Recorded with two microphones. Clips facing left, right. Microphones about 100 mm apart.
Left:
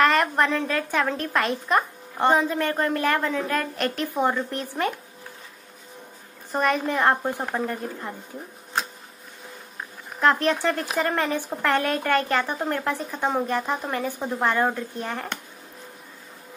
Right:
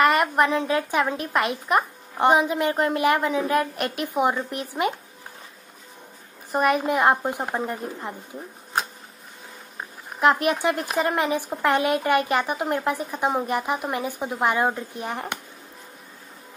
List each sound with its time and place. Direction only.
0.0 s a woman's voice: 10° right (ahead or behind)
6.5 s a woman's voice: 10° right (ahead or behind)
10.2 s a woman's voice: 15° right (ahead or behind)